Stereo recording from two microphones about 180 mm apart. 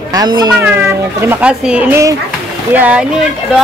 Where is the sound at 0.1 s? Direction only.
20° right (ahead or behind).